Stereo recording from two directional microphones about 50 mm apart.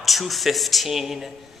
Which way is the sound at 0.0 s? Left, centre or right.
Centre.